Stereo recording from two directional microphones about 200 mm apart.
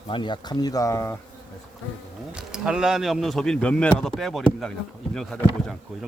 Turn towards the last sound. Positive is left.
turn(degrees=0)  # may be behind; listen again after turning